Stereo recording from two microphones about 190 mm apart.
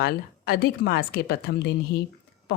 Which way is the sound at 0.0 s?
55° left (ahead or behind).